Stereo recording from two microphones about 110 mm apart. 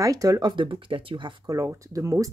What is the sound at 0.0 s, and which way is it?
Speech, 30° right (ahead or behind).